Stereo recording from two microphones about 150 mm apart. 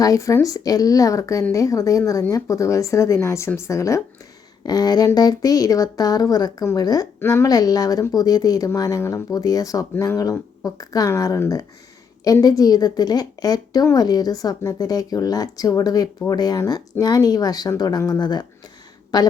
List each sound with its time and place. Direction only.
0.0 s speech: 20° left (ahead or behind)